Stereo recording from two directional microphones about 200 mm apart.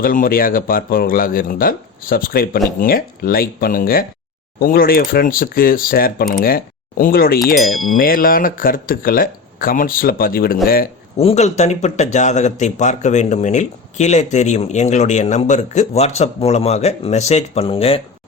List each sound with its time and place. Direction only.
0.0 s speech: 45° left (ahead or behind)
7.4 s wind chime: centre (ahead or behind)
7.9 s speech: 45° left (ahead or behind)
11.2 s speech: 30° left (ahead or behind)